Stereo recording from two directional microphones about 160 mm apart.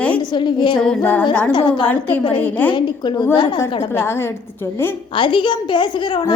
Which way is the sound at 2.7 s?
30° left (ahead or behind).